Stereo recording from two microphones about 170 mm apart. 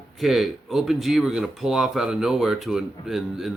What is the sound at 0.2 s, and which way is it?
Speech, centre (ahead or behind).